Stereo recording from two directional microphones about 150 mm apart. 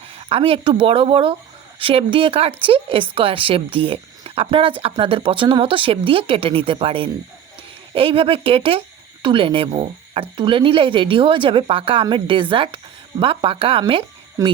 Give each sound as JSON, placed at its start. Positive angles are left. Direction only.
{"t": 0.1, "sound": "speech", "side_deg": -40}
{"t": 14.4, "sound": "speech", "side_deg": -20}